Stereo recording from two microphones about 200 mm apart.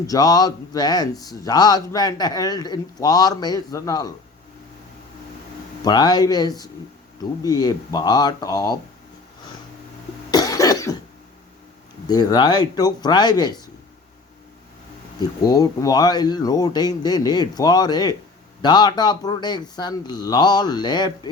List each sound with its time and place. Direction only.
0.1 s a man's voice: 20° left (ahead or behind)
5.8 s a man's voice: 20° left (ahead or behind)
10.3 s cough: 20° left (ahead or behind)
12.0 s a man's voice: 20° left (ahead or behind)
15.4 s a man's voice: 20° left (ahead or behind)